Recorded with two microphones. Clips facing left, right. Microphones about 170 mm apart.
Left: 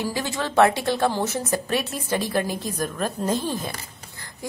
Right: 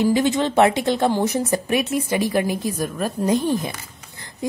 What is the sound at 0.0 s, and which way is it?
A woman's voice, 20° right (ahead or behind).